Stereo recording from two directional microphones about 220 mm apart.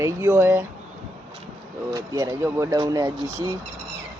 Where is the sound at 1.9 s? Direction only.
15° right (ahead or behind).